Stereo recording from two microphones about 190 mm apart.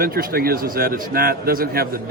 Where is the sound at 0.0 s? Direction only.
50° right (ahead or behind).